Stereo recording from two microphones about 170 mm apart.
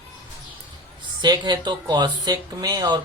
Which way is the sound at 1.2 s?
25° right (ahead or behind).